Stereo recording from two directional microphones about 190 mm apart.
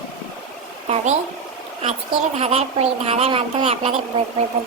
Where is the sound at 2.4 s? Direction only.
35° right (ahead or behind).